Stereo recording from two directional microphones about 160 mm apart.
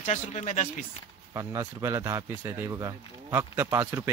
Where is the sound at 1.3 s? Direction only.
20° right (ahead or behind).